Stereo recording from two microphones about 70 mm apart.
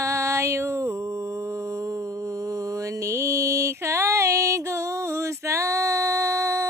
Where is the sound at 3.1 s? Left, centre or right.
Right.